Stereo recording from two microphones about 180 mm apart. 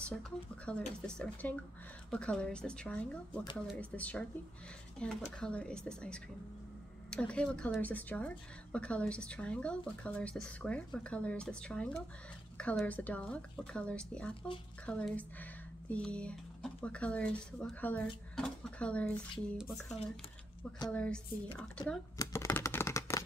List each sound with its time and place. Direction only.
0.7 s speech: 5° left (ahead or behind)
22.1 s computer keyboard: 15° left (ahead or behind)